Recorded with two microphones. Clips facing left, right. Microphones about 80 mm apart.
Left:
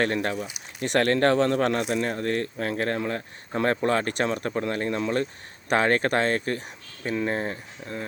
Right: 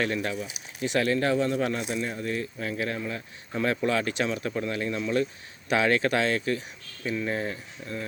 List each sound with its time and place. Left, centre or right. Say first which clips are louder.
0.0 s speech: left 3 dB; left
7.3 s speech: left 2 dB; left